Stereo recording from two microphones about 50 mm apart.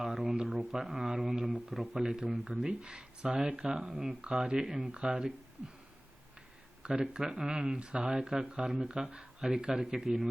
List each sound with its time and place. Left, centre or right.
0.0 s a sound: centre
0.4 s speech: centre
1.4 s speech: right
1.7 s speech: centre
2.6 s speech: centre
7.0 s speech: centre